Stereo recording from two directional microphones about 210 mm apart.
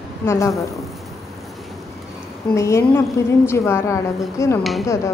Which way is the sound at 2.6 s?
15° left (ahead or behind).